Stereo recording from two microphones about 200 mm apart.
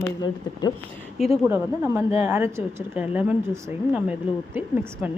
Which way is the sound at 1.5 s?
15° right (ahead or behind).